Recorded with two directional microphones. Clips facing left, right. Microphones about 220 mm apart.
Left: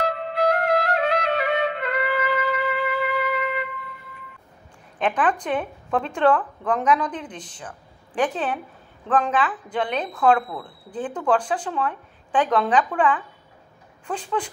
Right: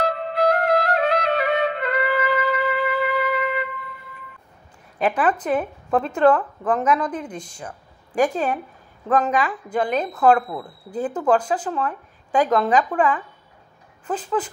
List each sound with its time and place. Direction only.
0.0 s music: 40° right (ahead or behind)
4.9 s a woman's voice: 10° right (ahead or behind)